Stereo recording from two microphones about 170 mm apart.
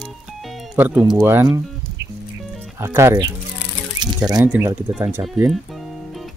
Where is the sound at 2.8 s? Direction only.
15° right (ahead or behind).